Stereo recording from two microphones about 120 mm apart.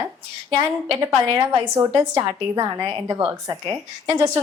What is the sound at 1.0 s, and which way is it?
A woman's voice, 30° right (ahead or behind).